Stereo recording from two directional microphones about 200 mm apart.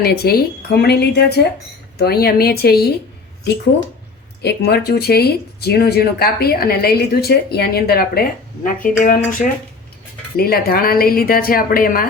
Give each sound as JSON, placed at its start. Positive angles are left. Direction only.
{"t": 0.0, "sound": "speech", "side_deg": 50}
{"t": 4.4, "sound": "speech", "side_deg": 55}